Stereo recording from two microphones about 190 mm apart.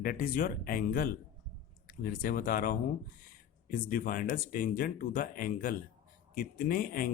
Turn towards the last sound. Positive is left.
turn(degrees=50)  # may be behind; listen again after turning